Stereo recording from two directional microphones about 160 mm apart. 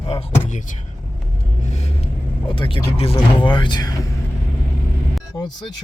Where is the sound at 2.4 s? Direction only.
30° left (ahead or behind).